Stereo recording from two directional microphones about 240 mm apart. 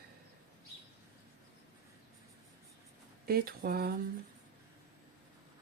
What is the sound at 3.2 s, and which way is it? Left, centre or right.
Speech, right.